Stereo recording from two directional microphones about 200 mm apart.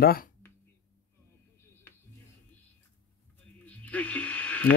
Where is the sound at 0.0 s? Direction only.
50° left (ahead or behind).